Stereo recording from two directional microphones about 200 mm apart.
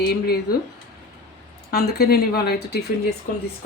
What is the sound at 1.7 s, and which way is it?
Speech, 50° left (ahead or behind).